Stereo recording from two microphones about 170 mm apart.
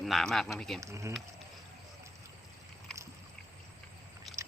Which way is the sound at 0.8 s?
15° right (ahead or behind).